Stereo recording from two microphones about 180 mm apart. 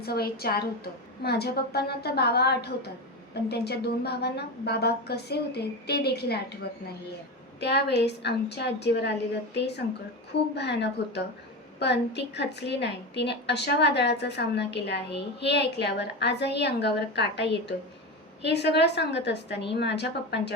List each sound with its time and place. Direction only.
0.0 s a woman's voice: 60° left (ahead or behind)